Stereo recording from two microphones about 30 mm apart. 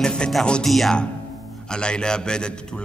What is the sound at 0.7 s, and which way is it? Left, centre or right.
Music, centre.